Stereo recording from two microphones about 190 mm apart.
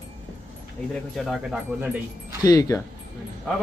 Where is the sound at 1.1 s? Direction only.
Centre (ahead or behind).